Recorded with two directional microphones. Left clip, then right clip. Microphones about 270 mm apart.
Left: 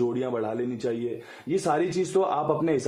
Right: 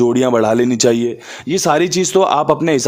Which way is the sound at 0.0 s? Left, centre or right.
Right.